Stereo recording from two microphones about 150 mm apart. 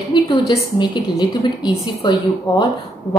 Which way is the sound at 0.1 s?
30° left (ahead or behind).